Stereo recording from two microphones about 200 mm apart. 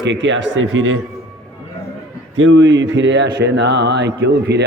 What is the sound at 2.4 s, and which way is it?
Speech, 65° right (ahead or behind).